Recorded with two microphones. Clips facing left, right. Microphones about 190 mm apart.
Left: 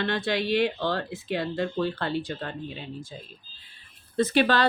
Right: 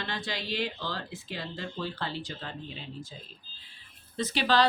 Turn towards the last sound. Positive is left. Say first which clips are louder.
# left 5 dB
turn(degrees=55)  # may be behind; listen again after turning